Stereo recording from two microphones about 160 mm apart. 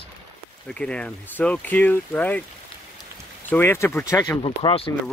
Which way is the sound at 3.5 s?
15° left (ahead or behind).